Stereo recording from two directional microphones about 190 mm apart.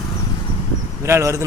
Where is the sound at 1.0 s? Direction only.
15° right (ahead or behind).